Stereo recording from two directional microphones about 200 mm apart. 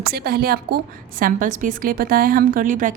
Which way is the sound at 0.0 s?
50° right (ahead or behind).